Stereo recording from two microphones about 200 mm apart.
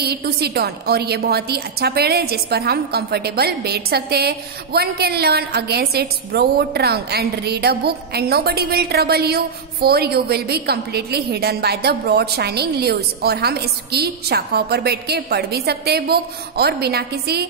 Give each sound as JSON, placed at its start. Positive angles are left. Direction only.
{"t": 0.0, "sound": "a woman's voice", "side_deg": -50}